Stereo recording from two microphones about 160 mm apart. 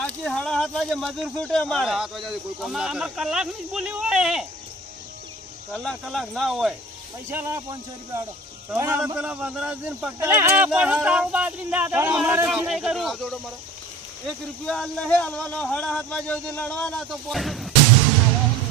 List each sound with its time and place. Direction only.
0.2 s speech: 5° left (ahead or behind)
5.7 s speech: centre (ahead or behind)
7.3 s speech: 15° right (ahead or behind); by 17.7 s centre (ahead or behind)